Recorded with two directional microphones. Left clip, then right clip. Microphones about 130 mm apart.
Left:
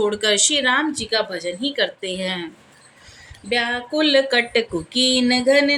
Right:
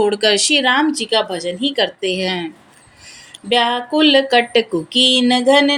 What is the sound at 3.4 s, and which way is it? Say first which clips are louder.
Speech: right 6 dB; 30° right (ahead or behind).